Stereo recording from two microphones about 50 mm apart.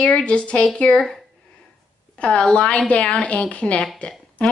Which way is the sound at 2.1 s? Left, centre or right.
Centre.